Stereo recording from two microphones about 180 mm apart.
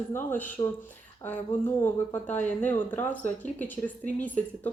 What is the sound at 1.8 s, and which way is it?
Speech, 10° left (ahead or behind).